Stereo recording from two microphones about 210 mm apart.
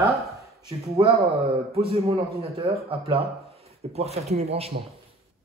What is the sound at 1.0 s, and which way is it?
A man's voice, 25° right (ahead or behind).